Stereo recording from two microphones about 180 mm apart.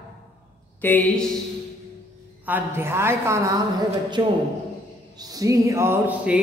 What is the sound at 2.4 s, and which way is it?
Music, 10° right (ahead or behind).